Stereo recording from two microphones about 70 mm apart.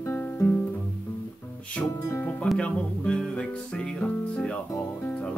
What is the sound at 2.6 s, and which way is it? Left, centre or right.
Speech, centre.